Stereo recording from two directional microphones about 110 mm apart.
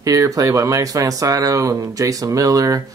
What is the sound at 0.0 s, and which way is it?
Speech, 30° right (ahead or behind).